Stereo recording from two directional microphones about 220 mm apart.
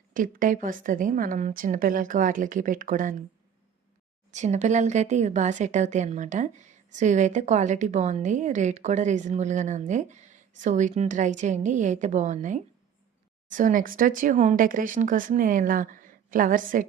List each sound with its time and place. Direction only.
0.1 s speech: 40° right (ahead or behind)
4.3 s speech: 30° right (ahead or behind)